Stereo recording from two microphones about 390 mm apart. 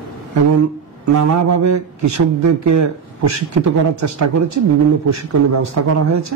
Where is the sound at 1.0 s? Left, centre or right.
Right.